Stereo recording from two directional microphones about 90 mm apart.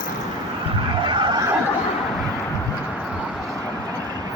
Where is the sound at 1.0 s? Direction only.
60° right (ahead or behind).